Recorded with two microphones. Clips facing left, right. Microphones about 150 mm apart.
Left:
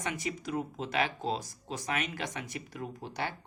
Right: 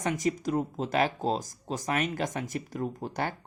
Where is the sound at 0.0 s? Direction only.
40° right (ahead or behind).